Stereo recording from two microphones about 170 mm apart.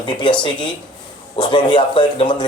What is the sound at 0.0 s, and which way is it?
A man's voice, 30° left (ahead or behind).